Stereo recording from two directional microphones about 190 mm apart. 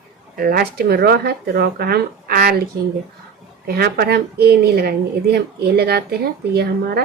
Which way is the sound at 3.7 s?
55° right (ahead or behind).